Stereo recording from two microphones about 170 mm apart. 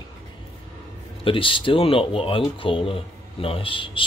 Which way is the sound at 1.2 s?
30° left (ahead or behind).